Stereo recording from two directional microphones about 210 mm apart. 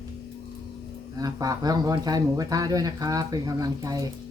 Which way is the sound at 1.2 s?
15° right (ahead or behind).